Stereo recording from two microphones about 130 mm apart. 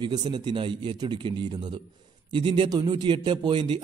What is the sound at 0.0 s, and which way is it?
A man's voice, 40° right (ahead or behind).